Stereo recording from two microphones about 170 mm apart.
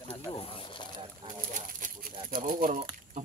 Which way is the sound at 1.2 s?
50° right (ahead or behind).